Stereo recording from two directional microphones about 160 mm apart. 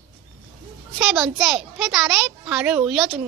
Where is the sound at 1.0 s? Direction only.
5° right (ahead or behind).